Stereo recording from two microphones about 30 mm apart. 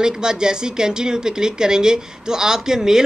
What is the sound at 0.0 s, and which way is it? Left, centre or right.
Speech, right.